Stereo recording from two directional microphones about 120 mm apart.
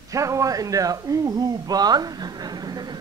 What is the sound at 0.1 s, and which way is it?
A man's voice, 25° right (ahead or behind).